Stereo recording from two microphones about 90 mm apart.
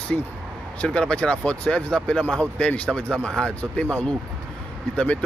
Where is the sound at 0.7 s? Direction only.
10° left (ahead or behind).